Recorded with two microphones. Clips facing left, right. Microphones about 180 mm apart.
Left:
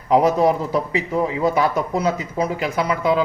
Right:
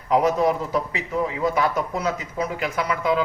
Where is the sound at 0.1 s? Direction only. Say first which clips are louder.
Left 4 dB; 35° left (ahead or behind).